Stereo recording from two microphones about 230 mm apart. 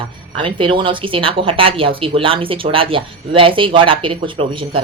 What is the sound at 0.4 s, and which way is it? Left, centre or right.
Speech, right.